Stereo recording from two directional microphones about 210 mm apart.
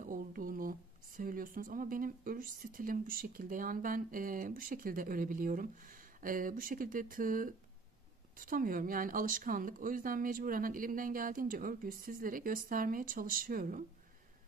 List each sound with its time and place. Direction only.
0.0 s speech: 40° right (ahead or behind)